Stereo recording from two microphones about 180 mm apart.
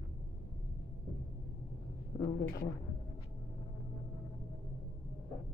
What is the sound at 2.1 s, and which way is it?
Speech, 35° left (ahead or behind).